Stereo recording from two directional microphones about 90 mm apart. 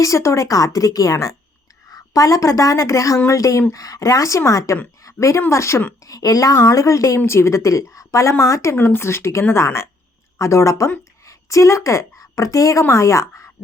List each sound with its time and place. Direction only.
0.0 s a woman's voice: 35° left (ahead or behind)
5.0 s a sound: 35° left (ahead or behind)
5.4 s a woman's voice: 30° left (ahead or behind)
6.1 s a woman's voice: 40° left (ahead or behind)
8.7 s a woman's voice: 25° left (ahead or behind)